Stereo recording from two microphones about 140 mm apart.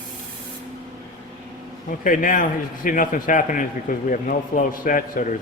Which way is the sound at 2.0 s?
75° left (ahead or behind).